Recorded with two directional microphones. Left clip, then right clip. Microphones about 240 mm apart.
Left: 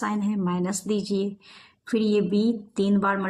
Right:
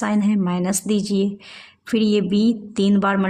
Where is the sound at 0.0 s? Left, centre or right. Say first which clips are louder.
Right 6 dB; right.